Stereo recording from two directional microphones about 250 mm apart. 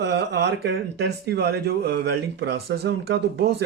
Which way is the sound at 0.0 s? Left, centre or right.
Right.